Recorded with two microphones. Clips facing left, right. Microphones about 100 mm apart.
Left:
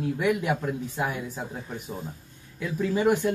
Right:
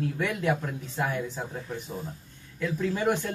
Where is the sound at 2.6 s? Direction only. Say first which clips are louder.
Left 2 dB; 10° left (ahead or behind).